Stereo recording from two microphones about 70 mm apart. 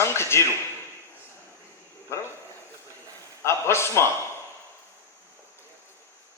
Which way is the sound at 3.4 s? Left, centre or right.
Left.